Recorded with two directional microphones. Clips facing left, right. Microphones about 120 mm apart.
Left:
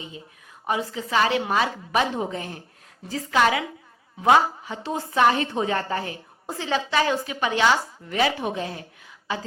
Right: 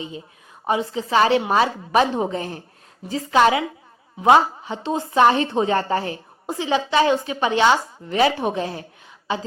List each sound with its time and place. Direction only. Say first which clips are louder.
0.7 s a woman's voice: right 4 dB; 30° right (ahead or behind)
6.5 s a woman's voice: right 4 dB; 15° right (ahead or behind); by 8.8 s 35° right (ahead or behind)
9.3 s a woman's voice: right 4 dB; 25° right (ahead or behind)